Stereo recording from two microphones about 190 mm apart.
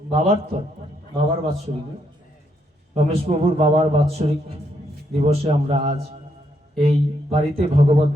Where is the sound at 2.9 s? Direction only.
35° right (ahead or behind).